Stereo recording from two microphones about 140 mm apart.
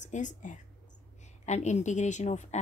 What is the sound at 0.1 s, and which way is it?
Speech, 65° left (ahead or behind).